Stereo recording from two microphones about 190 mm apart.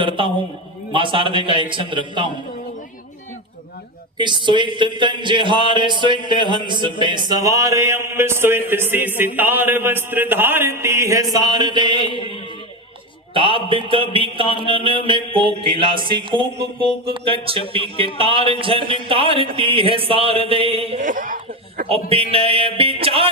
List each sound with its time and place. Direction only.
0.2 s speech: 25° right (ahead or behind)
4.2 s speech: 25° right (ahead or behind)
13.3 s speech: 25° right (ahead or behind)
21.0 s speech: 45° right (ahead or behind)
21.8 s speech: 30° right (ahead or behind)